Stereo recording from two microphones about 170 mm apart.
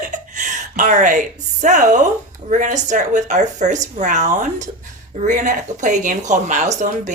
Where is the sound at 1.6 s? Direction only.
45° right (ahead or behind).